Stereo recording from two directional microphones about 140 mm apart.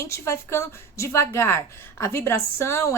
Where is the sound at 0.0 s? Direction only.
20° left (ahead or behind).